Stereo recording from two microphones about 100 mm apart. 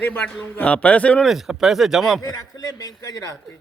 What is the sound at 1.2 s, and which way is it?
Speech, centre (ahead or behind).